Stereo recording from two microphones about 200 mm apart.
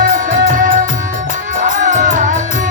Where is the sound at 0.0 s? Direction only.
40° right (ahead or behind).